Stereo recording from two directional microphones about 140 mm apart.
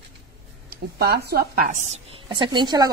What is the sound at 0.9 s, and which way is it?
Speech, 90° right.